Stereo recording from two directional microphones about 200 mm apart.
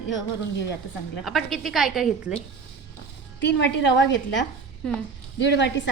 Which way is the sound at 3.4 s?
60° left (ahead or behind).